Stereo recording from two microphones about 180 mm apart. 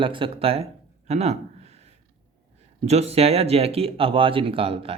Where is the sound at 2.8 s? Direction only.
35° right (ahead or behind).